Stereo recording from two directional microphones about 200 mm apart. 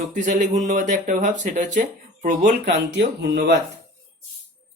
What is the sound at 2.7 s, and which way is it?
Speech, 60° right (ahead or behind).